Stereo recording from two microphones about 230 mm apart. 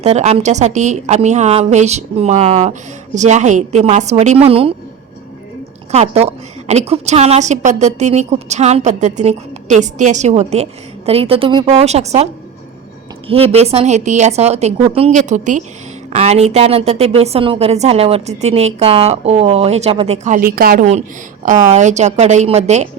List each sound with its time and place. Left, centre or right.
0.0 s a woman's voice: right
5.9 s a woman's voice: right